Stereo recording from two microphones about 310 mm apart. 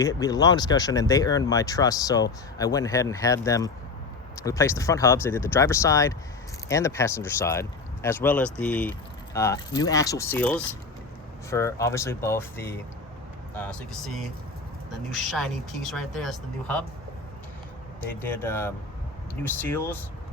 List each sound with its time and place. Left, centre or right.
0.0 s speech: centre
18.2 s speech: centre